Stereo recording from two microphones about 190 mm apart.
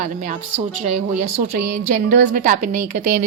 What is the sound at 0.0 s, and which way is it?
A woman's voice, 45° right (ahead or behind).